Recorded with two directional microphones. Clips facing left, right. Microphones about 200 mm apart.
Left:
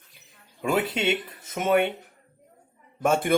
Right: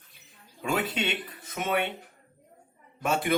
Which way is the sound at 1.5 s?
45° left (ahead or behind).